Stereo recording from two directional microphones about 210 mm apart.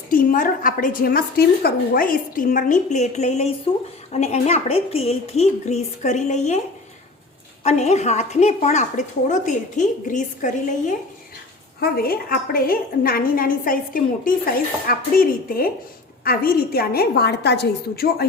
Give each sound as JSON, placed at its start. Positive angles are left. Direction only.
{"t": 0.1, "sound": "a woman's voice", "side_deg": 40}
{"t": 7.6, "sound": "a woman's voice", "side_deg": 30}